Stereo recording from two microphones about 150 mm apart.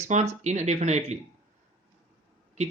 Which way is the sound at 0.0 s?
50° right (ahead or behind).